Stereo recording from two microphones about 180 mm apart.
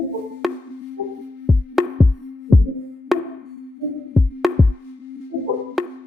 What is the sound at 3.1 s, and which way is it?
Wood block, centre (ahead or behind).